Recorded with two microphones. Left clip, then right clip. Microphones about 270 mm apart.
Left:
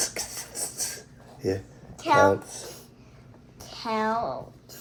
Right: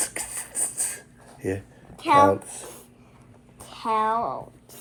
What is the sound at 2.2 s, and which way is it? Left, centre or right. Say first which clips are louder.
Speech: right 2 dB; right.